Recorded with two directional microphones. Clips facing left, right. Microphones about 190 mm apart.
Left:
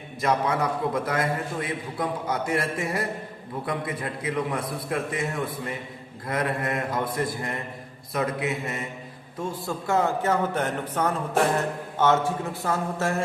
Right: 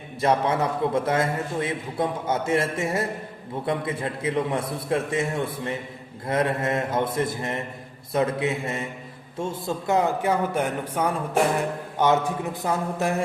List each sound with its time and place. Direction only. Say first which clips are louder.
0.2 s a man's voice: right 2 dB; 25° right (ahead or behind)